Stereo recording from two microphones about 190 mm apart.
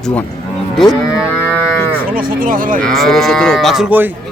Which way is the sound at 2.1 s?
45° right (ahead or behind).